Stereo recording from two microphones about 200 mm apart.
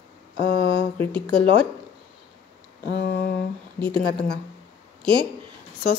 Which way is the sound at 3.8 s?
5° left (ahead or behind).